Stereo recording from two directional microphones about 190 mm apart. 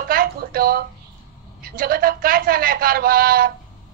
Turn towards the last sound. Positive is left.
turn(degrees=-50)  # may be behind; listen again after turning